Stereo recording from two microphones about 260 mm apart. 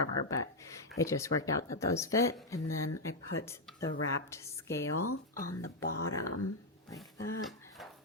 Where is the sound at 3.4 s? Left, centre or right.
Centre.